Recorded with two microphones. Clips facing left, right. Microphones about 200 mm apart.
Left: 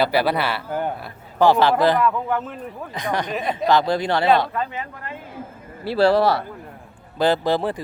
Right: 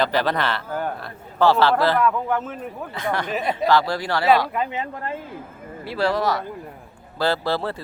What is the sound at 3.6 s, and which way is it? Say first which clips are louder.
Speech: left 2 dB; 20° left (ahead or behind).